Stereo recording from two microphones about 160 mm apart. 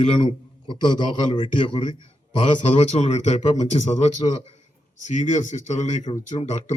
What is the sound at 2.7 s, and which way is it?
Speech, 45° left (ahead or behind).